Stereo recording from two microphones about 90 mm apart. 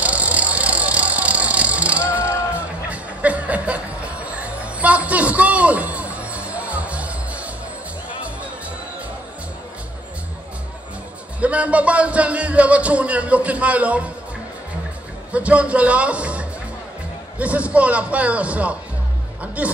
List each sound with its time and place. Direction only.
0.0 s vehicle: 15° right (ahead or behind)
2.9 s music: 15° right (ahead or behind)
11.3 s a man's voice: 15° right (ahead or behind)
15.3 s a man's voice: 15° right (ahead or behind)